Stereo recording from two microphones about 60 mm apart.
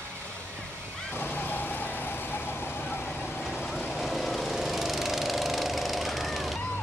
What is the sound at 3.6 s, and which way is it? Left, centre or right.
Lawn mower, centre.